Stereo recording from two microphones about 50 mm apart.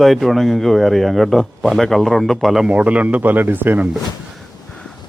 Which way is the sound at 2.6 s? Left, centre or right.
Right.